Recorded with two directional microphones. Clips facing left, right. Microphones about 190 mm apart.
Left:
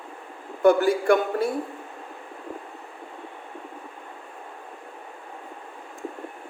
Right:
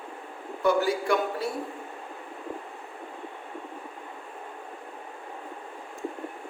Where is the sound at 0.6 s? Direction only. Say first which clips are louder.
Left 6 dB; 50° left (ahead or behind).